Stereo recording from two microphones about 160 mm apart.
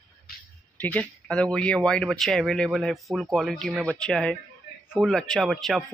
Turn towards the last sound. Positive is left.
turn(degrees=0)  # may be behind; listen again after turning